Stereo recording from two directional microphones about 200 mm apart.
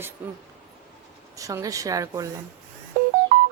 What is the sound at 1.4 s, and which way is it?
Speech, 15° right (ahead or behind).